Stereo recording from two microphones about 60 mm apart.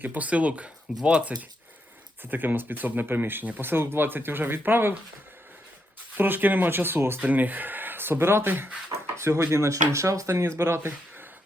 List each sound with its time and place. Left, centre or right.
0.0 s speech: right
2.3 s speech: right
6.1 s speech: right
7.2 s speech: right
9.1 s speech: right
10.6 s speech: right